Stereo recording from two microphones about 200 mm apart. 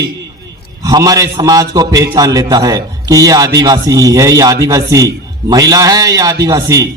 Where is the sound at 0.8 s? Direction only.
20° right (ahead or behind).